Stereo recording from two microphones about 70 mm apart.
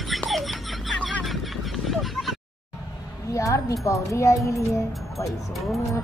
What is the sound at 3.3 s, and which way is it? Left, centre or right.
Speech, left.